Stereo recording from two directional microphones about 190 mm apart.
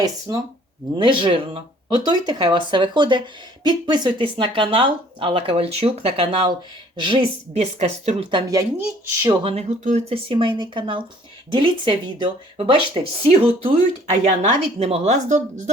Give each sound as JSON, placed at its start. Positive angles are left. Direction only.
{"t": 0.0, "sound": "speech", "side_deg": -15}
{"t": 9.4, "sound": "speech", "side_deg": -30}